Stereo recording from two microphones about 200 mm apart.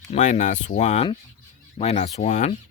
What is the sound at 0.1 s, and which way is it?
Speech, 35° left (ahead or behind).